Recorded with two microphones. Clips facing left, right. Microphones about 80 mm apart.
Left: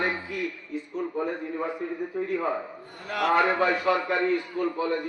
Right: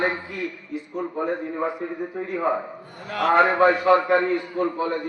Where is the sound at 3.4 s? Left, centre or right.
Right.